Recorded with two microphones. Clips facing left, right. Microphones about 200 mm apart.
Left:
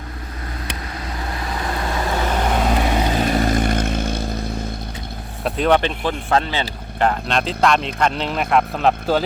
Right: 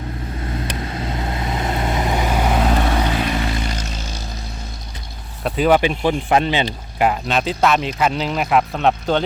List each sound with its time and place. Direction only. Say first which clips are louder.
0.9 s vehicle: right 2 dB; 25° right (ahead or behind); by 2.7 s 5° right (ahead or behind)
3.2 s vehicle: left 4 dB; 45° left (ahead or behind)
5.4 s speech: right 2 dB; centre (ahead or behind)
6.0 s speech: right 3 dB; 15° right (ahead or behind)
7.0 s speech: right 1 dB; 5° right (ahead or behind)